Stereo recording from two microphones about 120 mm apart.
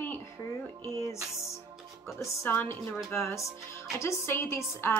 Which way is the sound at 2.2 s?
20° left (ahead or behind).